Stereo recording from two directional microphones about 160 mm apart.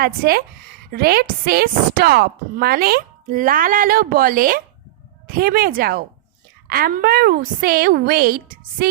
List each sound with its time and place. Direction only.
0.0 s a woman's voice: 70° right (ahead or behind)